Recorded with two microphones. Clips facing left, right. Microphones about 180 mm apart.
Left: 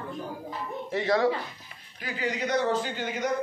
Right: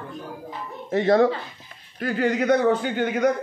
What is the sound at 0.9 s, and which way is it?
A man's voice, 50° right (ahead or behind).